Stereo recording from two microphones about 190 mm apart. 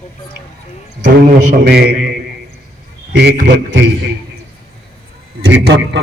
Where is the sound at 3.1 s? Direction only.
55° right (ahead or behind).